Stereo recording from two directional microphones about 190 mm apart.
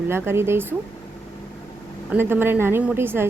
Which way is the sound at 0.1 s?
15° right (ahead or behind).